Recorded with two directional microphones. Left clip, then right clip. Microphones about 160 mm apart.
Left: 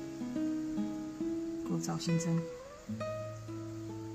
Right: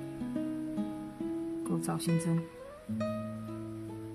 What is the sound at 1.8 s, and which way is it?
Speech, 20° right (ahead or behind).